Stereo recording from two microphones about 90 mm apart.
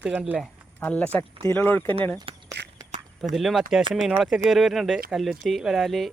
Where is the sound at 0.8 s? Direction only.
15° left (ahead or behind).